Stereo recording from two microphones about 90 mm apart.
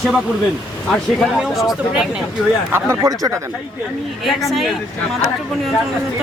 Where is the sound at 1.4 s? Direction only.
5° right (ahead or behind).